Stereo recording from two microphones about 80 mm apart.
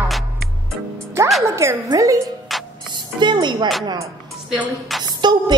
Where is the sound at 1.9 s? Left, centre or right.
Right.